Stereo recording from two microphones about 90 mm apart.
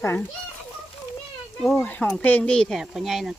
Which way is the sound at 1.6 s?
5° left (ahead or behind).